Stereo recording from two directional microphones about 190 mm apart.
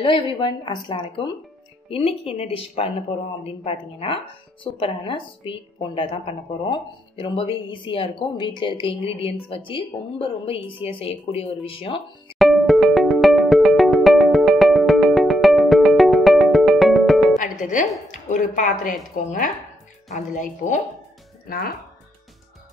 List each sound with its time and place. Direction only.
0.0 s a woman's voice: 25° left (ahead or behind)
12.4 s music: centre (ahead or behind)
17.4 s music: 45° left (ahead or behind)
18.3 s speech: 40° left (ahead or behind)